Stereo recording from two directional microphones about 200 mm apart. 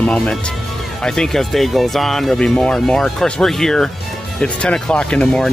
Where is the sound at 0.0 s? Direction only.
5° left (ahead or behind).